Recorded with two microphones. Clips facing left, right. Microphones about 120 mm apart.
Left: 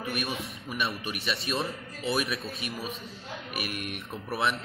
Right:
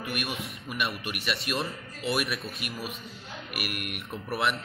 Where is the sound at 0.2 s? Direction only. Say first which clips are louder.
Left 1 dB; centre (ahead or behind).